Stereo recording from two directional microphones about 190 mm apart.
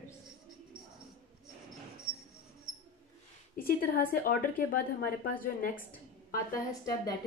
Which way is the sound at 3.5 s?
50° left (ahead or behind).